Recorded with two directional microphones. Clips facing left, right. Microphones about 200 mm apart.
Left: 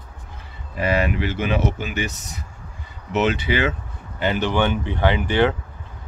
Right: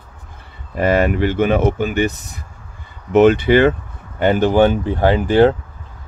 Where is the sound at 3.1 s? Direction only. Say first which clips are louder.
Right 10 dB; 50° right (ahead or behind).